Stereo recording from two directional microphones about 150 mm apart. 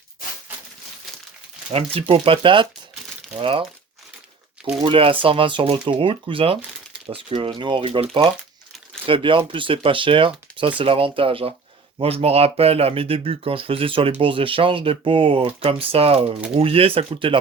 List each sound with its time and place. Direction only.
1.7 s speech: 40° right (ahead or behind)
4.8 s speech: 35° right (ahead or behind)